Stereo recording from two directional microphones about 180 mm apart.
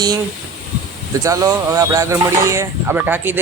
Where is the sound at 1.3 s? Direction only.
15° right (ahead or behind).